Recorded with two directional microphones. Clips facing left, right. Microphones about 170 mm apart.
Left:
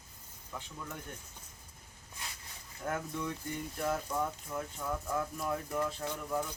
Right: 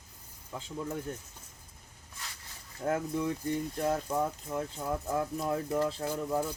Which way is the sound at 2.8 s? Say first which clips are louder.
Right 6 dB; 30° right (ahead or behind).